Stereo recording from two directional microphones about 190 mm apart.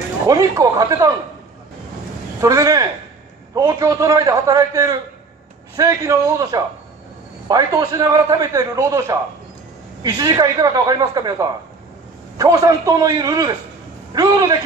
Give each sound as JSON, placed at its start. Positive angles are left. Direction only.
{"t": 0.3, "sound": "a man's voice", "side_deg": -20}
{"t": 2.4, "sound": "a man's voice", "side_deg": -20}